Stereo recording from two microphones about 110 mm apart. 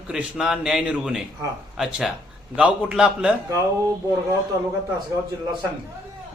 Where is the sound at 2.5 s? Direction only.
5° right (ahead or behind).